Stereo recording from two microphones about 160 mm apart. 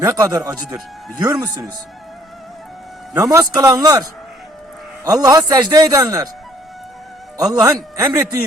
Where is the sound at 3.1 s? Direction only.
20° right (ahead or behind).